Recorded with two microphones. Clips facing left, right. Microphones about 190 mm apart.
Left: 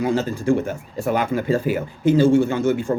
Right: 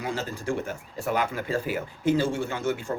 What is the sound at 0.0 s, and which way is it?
A man's voice, 25° left (ahead or behind).